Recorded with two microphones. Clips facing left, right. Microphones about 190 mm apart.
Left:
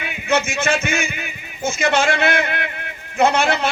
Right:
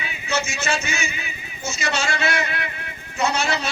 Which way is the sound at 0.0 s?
55° left (ahead or behind).